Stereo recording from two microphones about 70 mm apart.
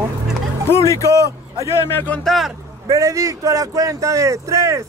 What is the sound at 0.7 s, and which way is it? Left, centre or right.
Speech, left.